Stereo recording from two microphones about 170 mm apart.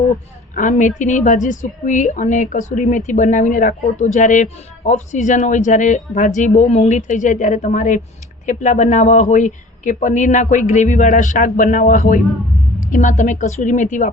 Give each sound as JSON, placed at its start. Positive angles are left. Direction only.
{"t": 0.5, "sound": "a woman's voice", "side_deg": 50}